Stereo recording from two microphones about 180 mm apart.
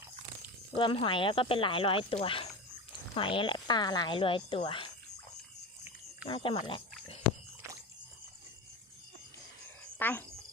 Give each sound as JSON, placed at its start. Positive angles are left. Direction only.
{"t": 0.7, "sound": "speech", "side_deg": 25}
{"t": 6.2, "sound": "speech", "side_deg": 25}
{"t": 10.0, "sound": "speech", "side_deg": 10}